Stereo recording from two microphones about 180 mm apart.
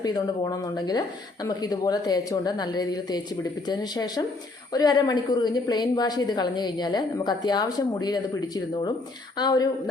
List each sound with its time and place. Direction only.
0.6 s a woman's voice: 20° left (ahead or behind)